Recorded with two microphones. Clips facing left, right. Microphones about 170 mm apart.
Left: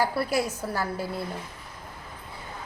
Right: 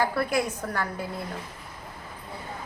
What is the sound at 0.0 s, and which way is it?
A woman's voice, 10° left (ahead or behind).